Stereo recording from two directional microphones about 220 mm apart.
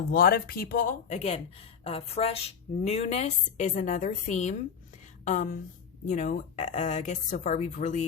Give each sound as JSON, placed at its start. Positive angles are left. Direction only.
{"t": 0.1, "sound": "speech", "side_deg": 40}